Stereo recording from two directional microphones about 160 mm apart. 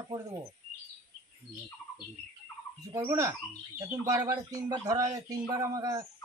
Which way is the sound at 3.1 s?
20° right (ahead or behind).